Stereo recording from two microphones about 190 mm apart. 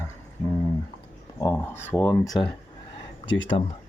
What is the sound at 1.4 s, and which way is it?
Speech, 10° left (ahead or behind).